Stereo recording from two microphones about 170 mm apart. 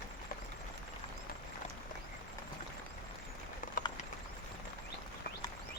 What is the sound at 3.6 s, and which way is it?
Clip-clop, 50° left (ahead or behind).